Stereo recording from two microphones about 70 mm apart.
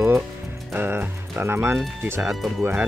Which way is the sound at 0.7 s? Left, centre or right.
Right.